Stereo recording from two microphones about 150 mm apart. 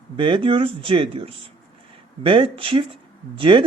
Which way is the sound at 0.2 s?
35° right (ahead or behind).